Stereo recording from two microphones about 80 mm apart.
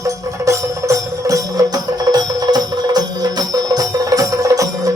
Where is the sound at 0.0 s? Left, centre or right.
Right.